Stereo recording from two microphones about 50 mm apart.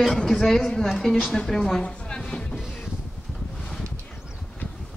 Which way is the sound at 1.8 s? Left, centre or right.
Centre.